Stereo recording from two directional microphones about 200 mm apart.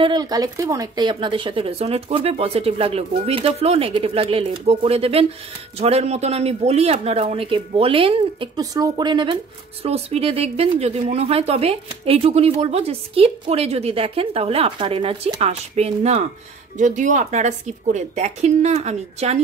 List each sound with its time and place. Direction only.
0.0 s speech: 20° right (ahead or behind)